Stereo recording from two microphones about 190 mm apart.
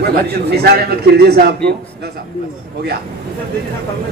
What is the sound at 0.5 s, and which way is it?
A man's voice, 55° right (ahead or behind).